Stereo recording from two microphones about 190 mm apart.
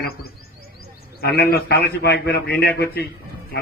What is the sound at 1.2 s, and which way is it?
A man's voice, 55° left (ahead or behind).